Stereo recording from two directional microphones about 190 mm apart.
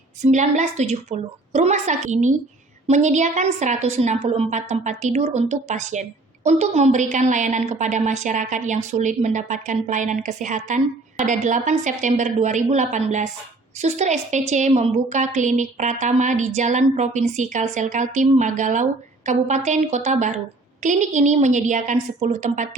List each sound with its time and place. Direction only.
0.2 s a woman's voice: 40° right (ahead or behind)